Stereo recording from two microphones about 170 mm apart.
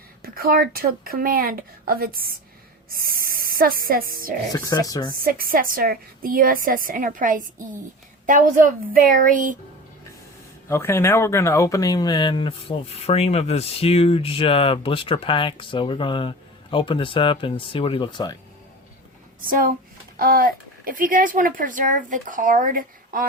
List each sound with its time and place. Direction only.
0.2 s a woman's voice: 60° right (ahead or behind)
4.5 s speech: 20° left (ahead or behind)
5.2 s a woman's voice: 60° right (ahead or behind)
10.7 s speech: 15° left (ahead or behind)
19.4 s a woman's voice: 55° right (ahead or behind)